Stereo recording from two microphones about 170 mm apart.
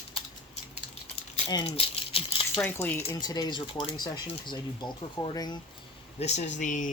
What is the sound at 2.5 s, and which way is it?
Speech, 15° left (ahead or behind).